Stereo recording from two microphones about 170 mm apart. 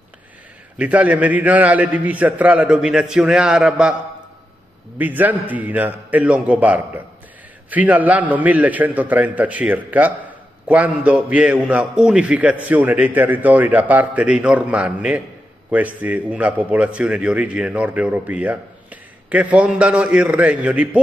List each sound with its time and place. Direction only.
0.7 s a man's voice: 10° right (ahead or behind)
4.9 s a man's voice: 10° right (ahead or behind)